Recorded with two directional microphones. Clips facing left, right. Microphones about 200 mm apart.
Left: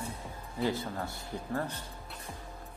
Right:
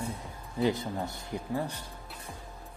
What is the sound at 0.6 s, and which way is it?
Speech, 15° right (ahead or behind).